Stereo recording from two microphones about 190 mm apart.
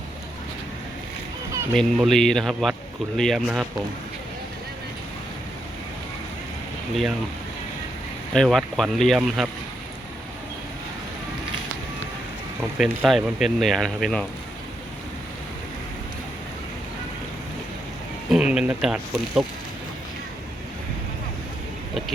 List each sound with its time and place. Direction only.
1.7 s speech: centre (ahead or behind)
6.9 s speech: centre (ahead or behind)
8.3 s speech: centre (ahead or behind)
12.7 s speech: 5° right (ahead or behind)
18.3 s speech: 5° right (ahead or behind)